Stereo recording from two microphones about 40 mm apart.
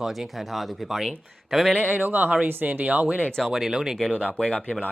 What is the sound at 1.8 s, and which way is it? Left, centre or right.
Speech, right.